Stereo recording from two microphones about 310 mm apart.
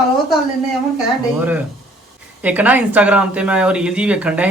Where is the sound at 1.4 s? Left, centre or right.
Centre.